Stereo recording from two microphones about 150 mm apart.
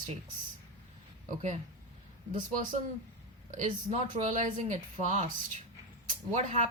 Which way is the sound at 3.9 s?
50° right (ahead or behind).